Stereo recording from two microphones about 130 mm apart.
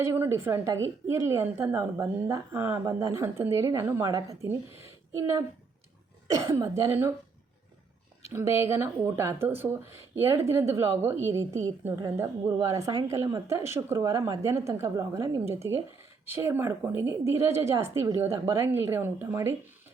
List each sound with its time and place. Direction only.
0.0 s a woman's voice: 20° right (ahead or behind)
8.3 s a woman's voice: 20° right (ahead or behind)